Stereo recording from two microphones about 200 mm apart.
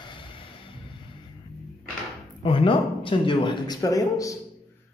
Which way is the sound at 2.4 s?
25° left (ahead or behind).